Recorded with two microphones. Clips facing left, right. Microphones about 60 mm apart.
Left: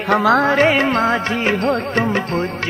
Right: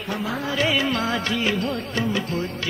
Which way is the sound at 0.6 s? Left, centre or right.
Left.